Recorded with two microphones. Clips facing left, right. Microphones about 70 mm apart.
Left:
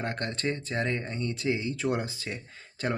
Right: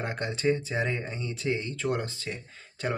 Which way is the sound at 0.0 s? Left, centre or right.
Centre.